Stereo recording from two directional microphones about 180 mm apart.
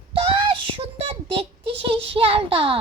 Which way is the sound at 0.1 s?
30° right (ahead or behind).